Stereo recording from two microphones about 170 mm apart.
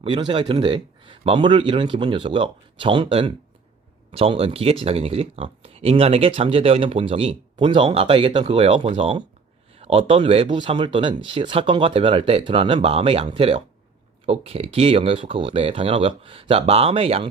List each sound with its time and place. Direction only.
0.0 s speech: 30° right (ahead or behind)